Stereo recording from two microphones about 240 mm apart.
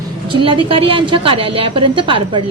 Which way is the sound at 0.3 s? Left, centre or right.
Right.